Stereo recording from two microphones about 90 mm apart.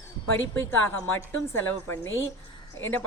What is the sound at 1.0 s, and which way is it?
Speech, 25° left (ahead or behind).